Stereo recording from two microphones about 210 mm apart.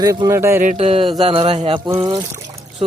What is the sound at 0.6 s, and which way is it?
Speech, 30° right (ahead or behind).